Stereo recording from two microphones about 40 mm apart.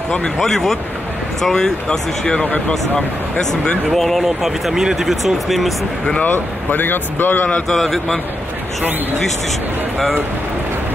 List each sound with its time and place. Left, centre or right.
0.4 s speech: centre; by 3.7 s left
3.9 s speech: centre
4.4 s speech: centre
6.3 s speech: left
7.6 s speech: centre